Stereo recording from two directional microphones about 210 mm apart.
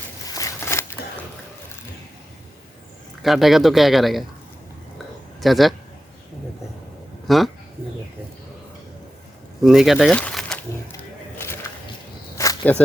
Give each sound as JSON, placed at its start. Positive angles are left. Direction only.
{"t": 0.3, "sound": "a sound", "side_deg": 15}
{"t": 3.2, "sound": "speech", "side_deg": 0}
{"t": 5.4, "sound": "a man's voice", "side_deg": 0}
{"t": 7.3, "sound": "speech", "side_deg": 0}
{"t": 9.6, "sound": "speech", "side_deg": 0}
{"t": 11.3, "sound": "a sound", "side_deg": 10}